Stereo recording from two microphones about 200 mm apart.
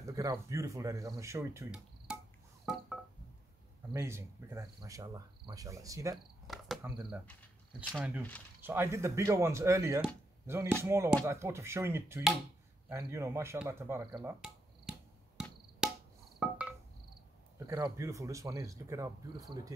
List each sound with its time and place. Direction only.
0.0 s speech: 15° right (ahead or behind)
2.1 s a sound: 5° right (ahead or behind)
3.9 s speech: 15° right (ahead or behind)
6.4 s cricket: centre (ahead or behind)
6.8 s speech: 5° right (ahead or behind)
15.8 s cricket: 5° right (ahead or behind)
17.6 s speech: 15° right (ahead or behind)